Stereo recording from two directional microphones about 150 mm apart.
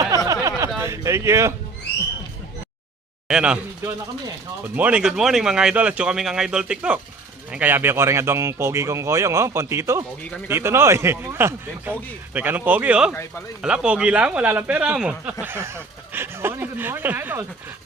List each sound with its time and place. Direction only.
0.1 s a sound: 20° right (ahead or behind)
0.8 s speech: 20° right (ahead or behind)
3.2 s speech: 5° right (ahead or behind)